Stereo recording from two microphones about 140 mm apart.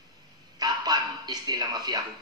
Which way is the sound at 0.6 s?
30° right (ahead or behind).